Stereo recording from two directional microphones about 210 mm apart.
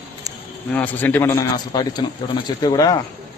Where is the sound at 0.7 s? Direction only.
10° left (ahead or behind).